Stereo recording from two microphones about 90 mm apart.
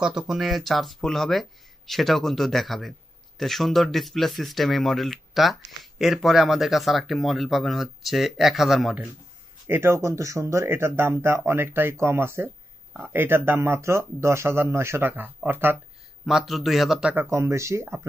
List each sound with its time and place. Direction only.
0.0 s speech: 5° right (ahead or behind)
9.7 s speech: 30° right (ahead or behind)
16.3 s speech: 5° right (ahead or behind)
17.1 s speech: 25° right (ahead or behind)